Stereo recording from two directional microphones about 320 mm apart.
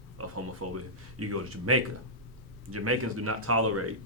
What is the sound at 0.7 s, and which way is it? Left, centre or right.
Speech, right.